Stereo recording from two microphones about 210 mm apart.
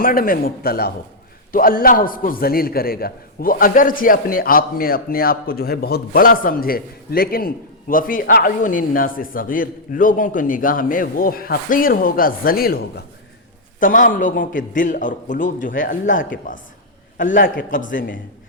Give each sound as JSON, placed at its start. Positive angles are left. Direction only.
{"t": 0.0, "sound": "a man's voice", "side_deg": 45}